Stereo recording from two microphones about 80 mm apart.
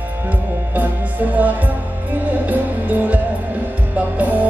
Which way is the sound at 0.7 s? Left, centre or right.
Right.